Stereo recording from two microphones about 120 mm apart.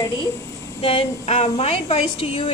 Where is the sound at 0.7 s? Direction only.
45° left (ahead or behind).